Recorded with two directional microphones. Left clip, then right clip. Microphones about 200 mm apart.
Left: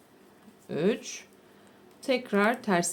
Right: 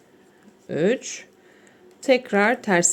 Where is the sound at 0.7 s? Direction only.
20° right (ahead or behind).